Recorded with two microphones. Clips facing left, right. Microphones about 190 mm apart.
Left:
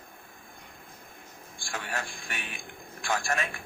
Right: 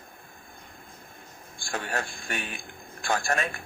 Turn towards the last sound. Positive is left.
turn(degrees=-40)  # may be behind; listen again after turning